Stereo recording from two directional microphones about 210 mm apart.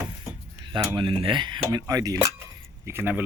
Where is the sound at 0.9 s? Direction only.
25° right (ahead or behind).